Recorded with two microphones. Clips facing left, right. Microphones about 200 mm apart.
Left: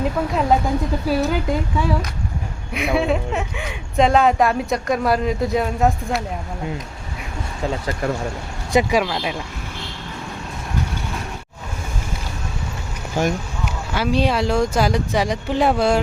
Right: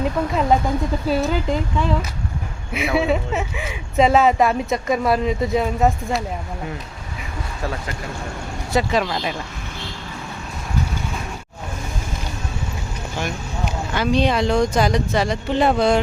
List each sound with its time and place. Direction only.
0.0 s speech: centre (ahead or behind)
8.7 s speech: 15° left (ahead or behind)
9.0 s speech: centre (ahead or behind)
13.2 s speech: 45° left (ahead or behind)
13.9 s speech: 5° left (ahead or behind)